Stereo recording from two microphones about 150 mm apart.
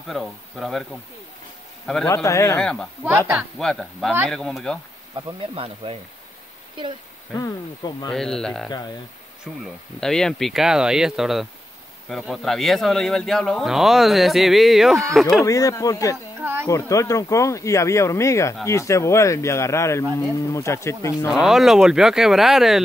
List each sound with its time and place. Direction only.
0.1 s speech: centre (ahead or behind)
2.0 s speech: 20° left (ahead or behind)
2.6 s speech: 5° left (ahead or behind)
3.0 s speech: 10° right (ahead or behind)
3.5 s speech: centre (ahead or behind)
5.5 s speech: 40° right (ahead or behind)
7.3 s speech: 25° left (ahead or behind)
8.1 s speech: 5° left (ahead or behind)
15.4 s speech: 20° left (ahead or behind)
21.3 s speech: centre (ahead or behind)